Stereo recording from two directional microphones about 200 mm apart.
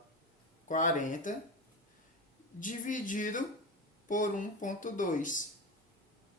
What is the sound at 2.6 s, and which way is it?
Speech, 40° left (ahead or behind).